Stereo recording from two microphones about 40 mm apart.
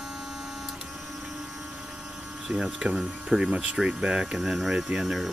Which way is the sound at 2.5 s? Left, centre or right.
Right.